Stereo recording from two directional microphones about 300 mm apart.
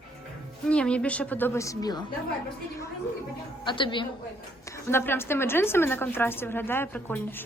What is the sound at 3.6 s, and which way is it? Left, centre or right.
A woman's voice, centre.